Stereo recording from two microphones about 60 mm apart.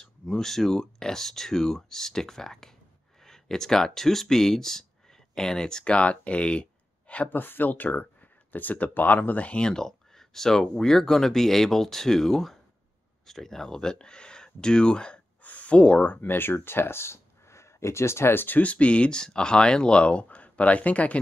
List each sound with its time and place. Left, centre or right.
0.0 s speech: centre
7.2 s speech: left; by 15.1 s centre
15.4 s a sound: left
16.2 s speech: left
18.6 s speech: left